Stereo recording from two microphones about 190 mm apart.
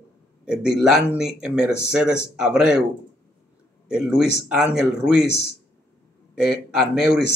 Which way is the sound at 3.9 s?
5° right (ahead or behind).